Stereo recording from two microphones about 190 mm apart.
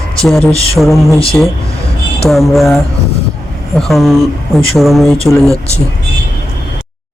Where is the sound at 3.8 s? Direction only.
Centre (ahead or behind).